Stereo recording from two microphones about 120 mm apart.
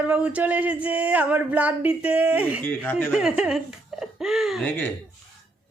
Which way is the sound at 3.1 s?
5° right (ahead or behind).